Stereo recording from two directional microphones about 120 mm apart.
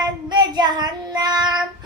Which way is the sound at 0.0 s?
35° right (ahead or behind).